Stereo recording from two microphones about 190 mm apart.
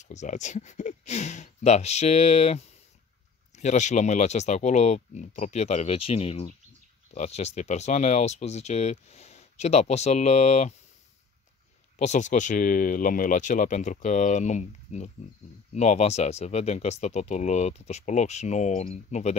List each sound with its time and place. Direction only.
0.0 s speech: 40° left (ahead or behind)
12.0 s speech: 40° left (ahead or behind)